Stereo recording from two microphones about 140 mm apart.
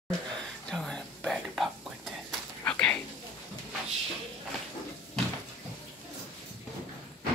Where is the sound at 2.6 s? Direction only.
10° left (ahead or behind).